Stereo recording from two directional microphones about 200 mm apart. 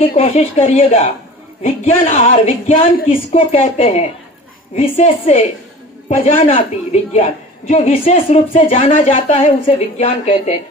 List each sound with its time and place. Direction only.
0.0 s a woman's voice: 30° left (ahead or behind)